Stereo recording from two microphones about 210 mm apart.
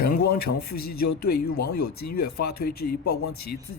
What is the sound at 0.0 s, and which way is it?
Speech, 45° left (ahead or behind).